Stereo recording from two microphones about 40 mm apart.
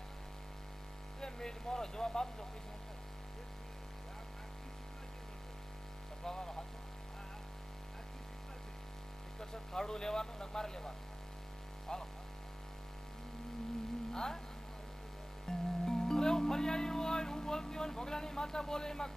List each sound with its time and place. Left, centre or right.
1.2 s speech: centre
6.2 s speech: centre
9.4 s speech: centre
14.1 s speech: centre
15.4 s music: centre